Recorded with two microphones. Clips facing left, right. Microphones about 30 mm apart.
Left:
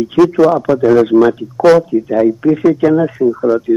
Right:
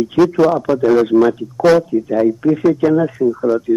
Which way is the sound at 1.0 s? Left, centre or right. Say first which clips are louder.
Left 3 dB; centre.